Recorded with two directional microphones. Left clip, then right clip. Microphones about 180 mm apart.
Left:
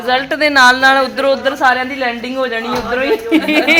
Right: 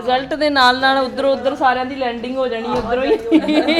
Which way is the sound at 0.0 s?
15° left (ahead or behind).